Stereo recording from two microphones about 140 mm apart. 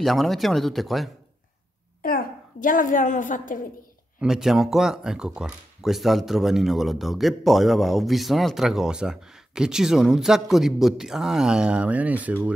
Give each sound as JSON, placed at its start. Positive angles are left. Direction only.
{"t": 0.0, "sound": "speech", "side_deg": 0}
{"t": 2.0, "sound": "a woman's voice", "side_deg": 75}
{"t": 4.2, "sound": "speech", "side_deg": -5}